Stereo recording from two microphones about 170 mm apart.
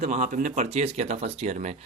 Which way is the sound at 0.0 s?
45° right (ahead or behind).